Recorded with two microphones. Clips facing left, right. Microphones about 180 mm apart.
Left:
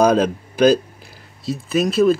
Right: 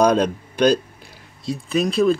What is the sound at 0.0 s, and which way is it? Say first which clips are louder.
Speech: left 1 dB; 5° left (ahead or behind).